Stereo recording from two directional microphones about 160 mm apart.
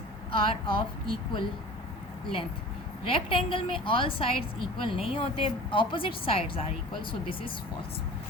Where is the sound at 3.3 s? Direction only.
30° left (ahead or behind).